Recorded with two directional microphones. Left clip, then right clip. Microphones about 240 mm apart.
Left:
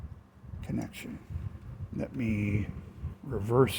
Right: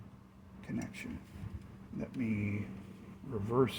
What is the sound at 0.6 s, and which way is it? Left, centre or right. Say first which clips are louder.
Speech: left 4 dB; left.